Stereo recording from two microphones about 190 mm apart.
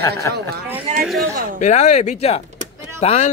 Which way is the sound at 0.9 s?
35° right (ahead or behind).